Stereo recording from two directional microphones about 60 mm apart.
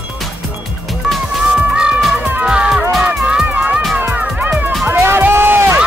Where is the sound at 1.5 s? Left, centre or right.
Centre.